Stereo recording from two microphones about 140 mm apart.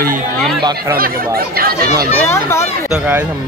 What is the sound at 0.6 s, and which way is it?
Speech, 30° right (ahead or behind).